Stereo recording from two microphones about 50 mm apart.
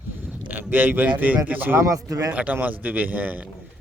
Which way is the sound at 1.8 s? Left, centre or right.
Right.